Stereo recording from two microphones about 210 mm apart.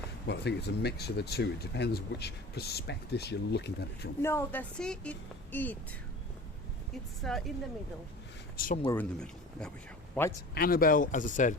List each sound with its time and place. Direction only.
0.3 s speech: 50° left (ahead or behind)
4.2 s a woman's voice: 10° left (ahead or behind)
7.2 s a woman's voice: centre (ahead or behind)
8.5 s speech: 40° left (ahead or behind)
8.8 s a woman's voice: 15° left (ahead or behind)
9.1 s a woman's voice: 5° left (ahead or behind)
10.5 s speech: 45° left (ahead or behind)